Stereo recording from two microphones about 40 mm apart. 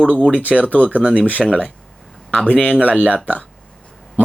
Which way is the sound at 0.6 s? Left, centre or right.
Left.